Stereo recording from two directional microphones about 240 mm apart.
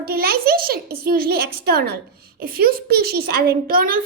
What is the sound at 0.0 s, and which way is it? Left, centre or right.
A woman's voice, right.